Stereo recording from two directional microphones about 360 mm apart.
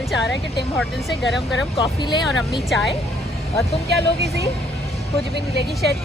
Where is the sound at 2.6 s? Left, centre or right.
Centre.